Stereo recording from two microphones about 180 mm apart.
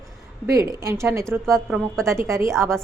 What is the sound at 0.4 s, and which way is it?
A woman's voice, 15° right (ahead or behind).